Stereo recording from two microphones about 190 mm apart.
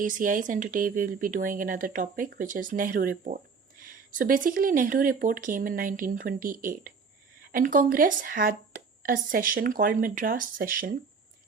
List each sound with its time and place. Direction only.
0.0 s speech: 45° right (ahead or behind)